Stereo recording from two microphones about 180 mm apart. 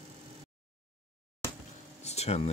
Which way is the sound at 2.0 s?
35° left (ahead or behind).